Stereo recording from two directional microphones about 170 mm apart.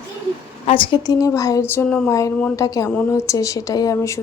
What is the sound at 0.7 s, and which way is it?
Speech, 30° left (ahead or behind).